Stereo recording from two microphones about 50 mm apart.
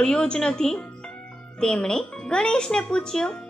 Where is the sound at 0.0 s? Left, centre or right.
Centre.